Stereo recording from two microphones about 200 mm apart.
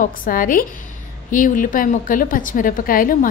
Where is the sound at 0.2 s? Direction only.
45° left (ahead or behind).